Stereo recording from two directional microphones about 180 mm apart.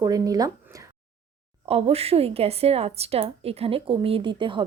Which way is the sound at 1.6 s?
35° right (ahead or behind).